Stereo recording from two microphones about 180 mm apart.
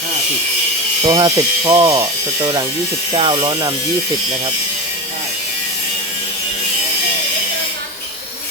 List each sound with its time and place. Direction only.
1.0 s speech: 25° right (ahead or behind)
3.2 s speech: 25° right (ahead or behind)